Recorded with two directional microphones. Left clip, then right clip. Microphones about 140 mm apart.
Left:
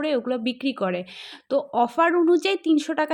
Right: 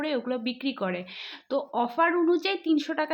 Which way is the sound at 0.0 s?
40° left (ahead or behind).